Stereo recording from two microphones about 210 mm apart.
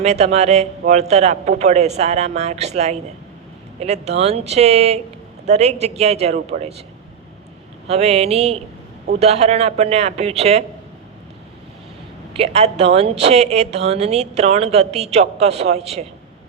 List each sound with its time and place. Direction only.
0.0 s a woman's voice: 30° right (ahead or behind)
7.9 s a man's voice: 30° right (ahead or behind)
12.4 s a woman's voice: 30° right (ahead or behind)